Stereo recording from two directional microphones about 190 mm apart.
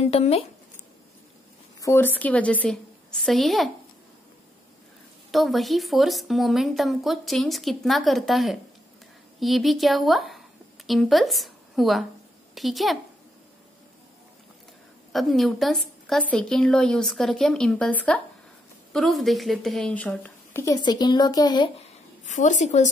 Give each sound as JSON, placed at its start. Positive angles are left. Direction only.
{"t": 1.8, "sound": "a woman's voice", "side_deg": 10}
{"t": 5.3, "sound": "a woman's voice", "side_deg": 0}
{"t": 15.1, "sound": "a woman's voice", "side_deg": 0}
{"t": 22.2, "sound": "speech", "side_deg": 40}